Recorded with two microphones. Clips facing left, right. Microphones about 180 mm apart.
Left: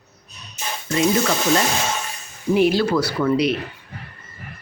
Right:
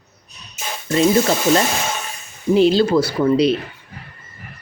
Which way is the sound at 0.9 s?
30° right (ahead or behind).